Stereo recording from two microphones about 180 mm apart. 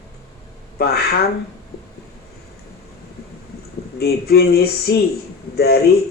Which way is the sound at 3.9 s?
60° left (ahead or behind).